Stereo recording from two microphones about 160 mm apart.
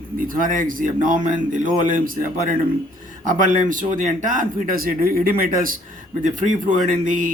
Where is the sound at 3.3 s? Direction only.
55° right (ahead or behind).